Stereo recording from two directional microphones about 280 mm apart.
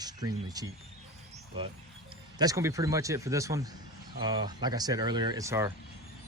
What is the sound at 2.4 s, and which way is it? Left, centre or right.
Speech, centre.